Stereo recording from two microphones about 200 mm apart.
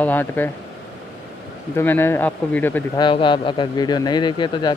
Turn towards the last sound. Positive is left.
turn(degrees=25)  # may be behind; listen again after turning